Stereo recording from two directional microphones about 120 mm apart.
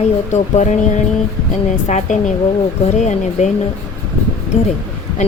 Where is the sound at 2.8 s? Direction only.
75° left (ahead or behind).